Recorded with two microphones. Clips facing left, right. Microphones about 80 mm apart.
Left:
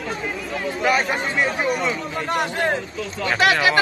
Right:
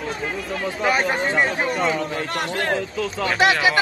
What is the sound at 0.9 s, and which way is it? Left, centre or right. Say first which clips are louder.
Speech: even; right.